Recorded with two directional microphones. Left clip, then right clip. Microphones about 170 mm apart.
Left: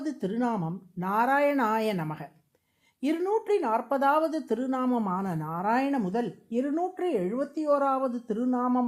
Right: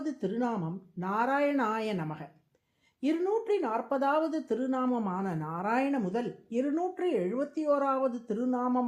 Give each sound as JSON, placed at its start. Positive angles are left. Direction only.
{"t": 0.0, "sound": "speech", "side_deg": 35}
{"t": 5.6, "sound": "speech", "side_deg": 20}
{"t": 6.5, "sound": "speech", "side_deg": 35}